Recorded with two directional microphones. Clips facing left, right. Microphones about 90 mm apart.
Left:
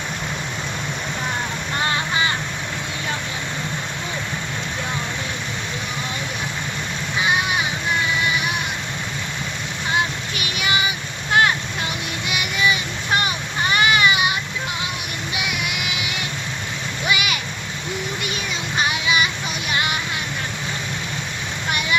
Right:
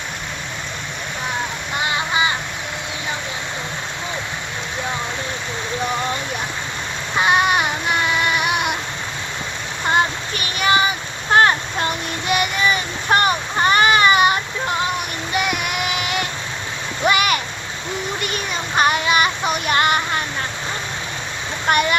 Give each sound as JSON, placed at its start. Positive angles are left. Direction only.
{"t": 7.2, "sound": "child singing", "side_deg": -55}
{"t": 9.9, "sound": "a sound", "side_deg": -45}
{"t": 15.3, "sound": "child singing", "side_deg": -45}
{"t": 17.1, "sound": "a sound", "side_deg": -45}
{"t": 18.2, "sound": "child singing", "side_deg": -50}
{"t": 21.7, "sound": "vehicle", "side_deg": -50}